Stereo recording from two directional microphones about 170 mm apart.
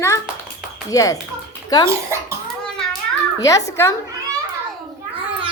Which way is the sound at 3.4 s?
20° left (ahead or behind).